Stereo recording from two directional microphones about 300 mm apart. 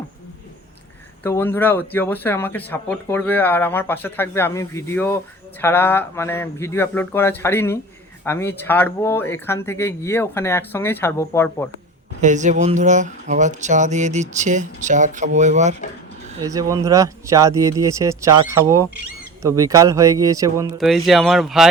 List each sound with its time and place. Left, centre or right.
1.2 s speech: centre
12.2 s speech: right
16.4 s speech: centre
20.7 s speech: centre